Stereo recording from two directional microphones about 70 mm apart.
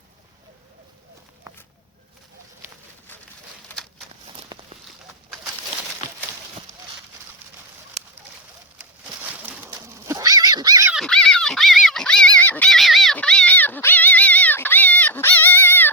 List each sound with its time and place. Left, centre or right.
4.5 s a sound: right
8.8 s pigeon: centre
9.6 s pigeon: right
10.2 s dog: right
11.0 s dog: centre
12.4 s a sound: left
12.6 s dog: centre
13.2 s dog: centre
13.5 s dog: left
15.3 s a sound: left